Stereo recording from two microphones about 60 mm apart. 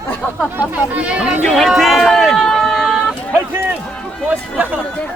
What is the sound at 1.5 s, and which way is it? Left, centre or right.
Speech, centre.